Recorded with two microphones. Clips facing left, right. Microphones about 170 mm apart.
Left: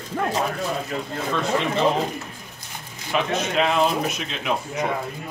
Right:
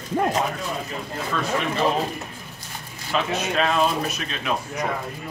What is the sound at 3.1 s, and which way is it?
Speech, 15° left (ahead or behind).